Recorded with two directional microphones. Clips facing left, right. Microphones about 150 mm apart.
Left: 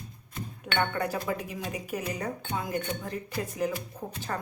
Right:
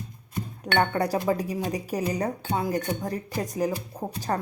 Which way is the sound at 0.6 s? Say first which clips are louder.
Right 5 dB; 35° right (ahead or behind).